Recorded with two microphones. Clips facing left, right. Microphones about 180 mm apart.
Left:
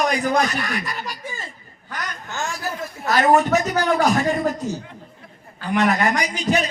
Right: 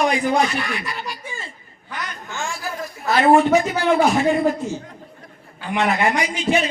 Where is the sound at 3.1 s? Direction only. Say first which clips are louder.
Right 2 dB; 40° left (ahead or behind).